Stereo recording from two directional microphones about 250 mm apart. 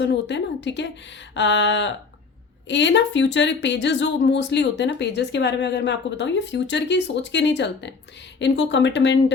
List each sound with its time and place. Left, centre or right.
0.0 s speech: left